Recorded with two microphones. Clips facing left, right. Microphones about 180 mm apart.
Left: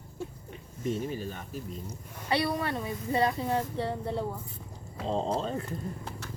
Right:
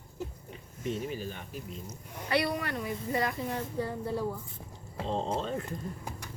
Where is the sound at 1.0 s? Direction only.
40° left (ahead or behind).